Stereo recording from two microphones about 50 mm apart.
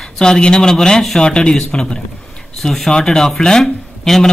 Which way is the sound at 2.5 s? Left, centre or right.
Centre.